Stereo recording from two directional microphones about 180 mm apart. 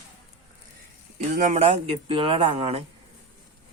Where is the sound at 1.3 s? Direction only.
45° right (ahead or behind).